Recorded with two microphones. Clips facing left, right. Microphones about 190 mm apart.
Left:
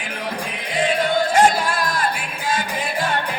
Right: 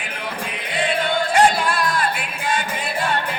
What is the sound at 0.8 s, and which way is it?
Music, 45° left (ahead or behind).